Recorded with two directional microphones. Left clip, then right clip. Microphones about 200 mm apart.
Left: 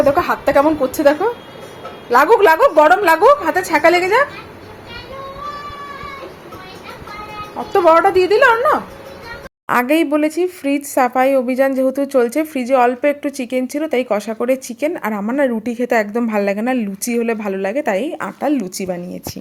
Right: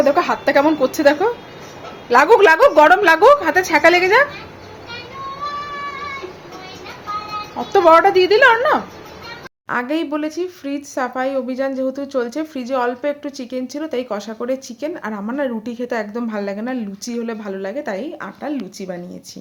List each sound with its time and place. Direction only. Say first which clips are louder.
0.0 s a woman's voice: left 1 dB; centre (ahead or behind)
7.7 s a woman's voice: even; 10° right (ahead or behind)
9.6 s speech: left 6 dB; 25° left (ahead or behind); by 18.9 s 40° left (ahead or behind)